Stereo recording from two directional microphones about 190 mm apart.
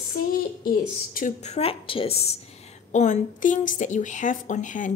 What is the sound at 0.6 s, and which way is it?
A woman's voice, 50° left (ahead or behind).